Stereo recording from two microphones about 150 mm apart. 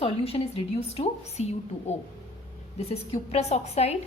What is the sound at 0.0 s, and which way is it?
A woman's voice, 40° left (ahead or behind).